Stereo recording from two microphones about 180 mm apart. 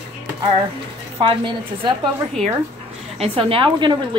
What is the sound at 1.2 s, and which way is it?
Speech, 25° right (ahead or behind).